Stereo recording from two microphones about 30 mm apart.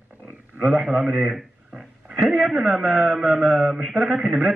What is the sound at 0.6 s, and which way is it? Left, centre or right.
Speech, centre.